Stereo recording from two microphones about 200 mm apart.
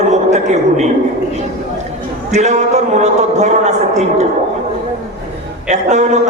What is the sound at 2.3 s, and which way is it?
A man's voice, 35° right (ahead or behind).